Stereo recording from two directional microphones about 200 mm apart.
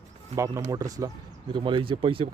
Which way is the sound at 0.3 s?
15° right (ahead or behind).